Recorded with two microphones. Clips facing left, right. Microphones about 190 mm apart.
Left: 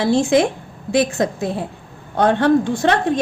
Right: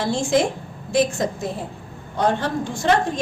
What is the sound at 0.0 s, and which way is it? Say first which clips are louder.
A woman's voice: left 5 dB; 60° left (ahead or behind).